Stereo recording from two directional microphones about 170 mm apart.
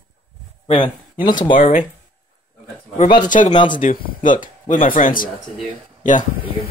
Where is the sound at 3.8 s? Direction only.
55° left (ahead or behind).